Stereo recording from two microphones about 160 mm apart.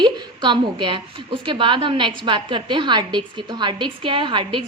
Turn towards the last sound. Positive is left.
turn(degrees=-30)  # may be behind; listen again after turning